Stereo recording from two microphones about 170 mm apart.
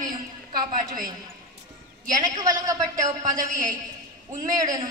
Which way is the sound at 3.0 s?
50° right (ahead or behind).